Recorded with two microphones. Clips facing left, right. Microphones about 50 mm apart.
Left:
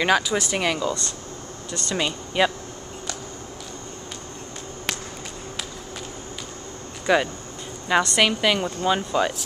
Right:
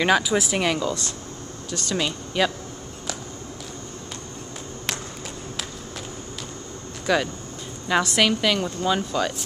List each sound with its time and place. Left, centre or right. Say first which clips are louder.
0.0 s speech: right 1 dB; centre
7.1 s speech: left 2 dB; centre